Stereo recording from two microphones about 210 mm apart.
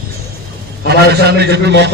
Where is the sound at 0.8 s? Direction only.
50° right (ahead or behind).